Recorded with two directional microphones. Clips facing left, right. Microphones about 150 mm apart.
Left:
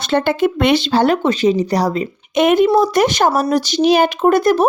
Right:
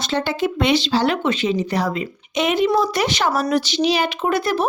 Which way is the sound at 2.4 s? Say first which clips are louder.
Left 6 dB; 50° left (ahead or behind).